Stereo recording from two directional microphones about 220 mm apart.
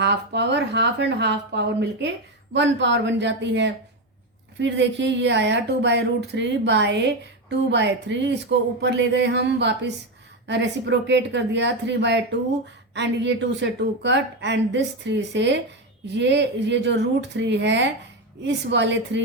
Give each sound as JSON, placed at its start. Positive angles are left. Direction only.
{"t": 0.0, "sound": "a woman's voice", "side_deg": -50}